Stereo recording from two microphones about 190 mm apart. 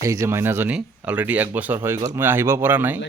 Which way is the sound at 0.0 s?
15° right (ahead or behind).